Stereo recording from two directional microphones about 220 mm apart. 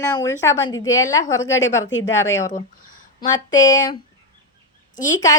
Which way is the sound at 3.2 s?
15° left (ahead or behind).